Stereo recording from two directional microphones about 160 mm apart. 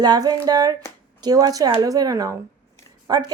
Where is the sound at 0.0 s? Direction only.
25° right (ahead or behind).